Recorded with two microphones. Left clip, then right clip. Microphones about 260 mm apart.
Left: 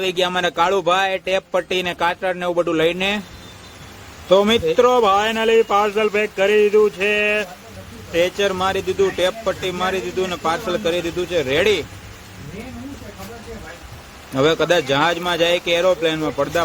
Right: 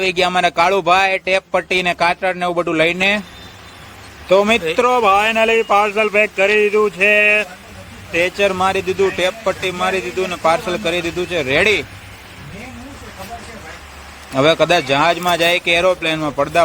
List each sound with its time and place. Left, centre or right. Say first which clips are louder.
0.0 s speech: right 4 dB; right
4.3 s speech: right 2 dB; right
14.3 s speech: right 3 dB; right